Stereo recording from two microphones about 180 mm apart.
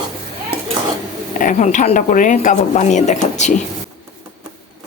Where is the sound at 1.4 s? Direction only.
45° left (ahead or behind).